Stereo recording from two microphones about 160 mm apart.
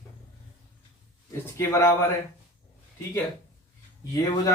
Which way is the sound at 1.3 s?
20° left (ahead or behind).